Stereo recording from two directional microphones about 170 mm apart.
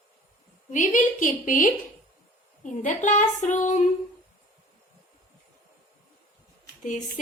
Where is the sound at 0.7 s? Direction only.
50° left (ahead or behind).